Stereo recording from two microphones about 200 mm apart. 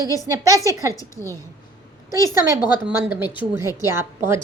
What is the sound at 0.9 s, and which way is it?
Speech, 15° left (ahead or behind).